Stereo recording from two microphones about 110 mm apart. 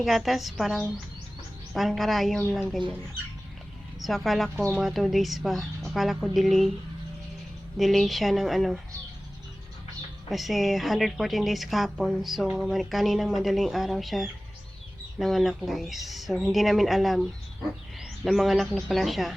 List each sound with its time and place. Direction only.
0.0 s speech: centre (ahead or behind)
4.0 s speech: centre (ahead or behind)
7.8 s speech: centre (ahead or behind)
10.2 s speech: centre (ahead or behind)
18.3 s speech: centre (ahead or behind)